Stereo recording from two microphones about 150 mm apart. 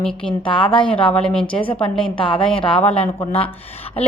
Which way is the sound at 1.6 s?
35° left (ahead or behind).